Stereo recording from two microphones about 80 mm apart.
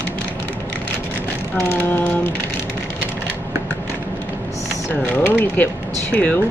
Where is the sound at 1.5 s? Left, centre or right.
Left.